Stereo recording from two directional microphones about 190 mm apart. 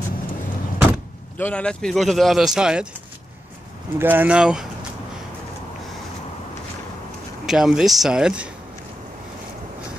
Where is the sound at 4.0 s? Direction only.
10° right (ahead or behind).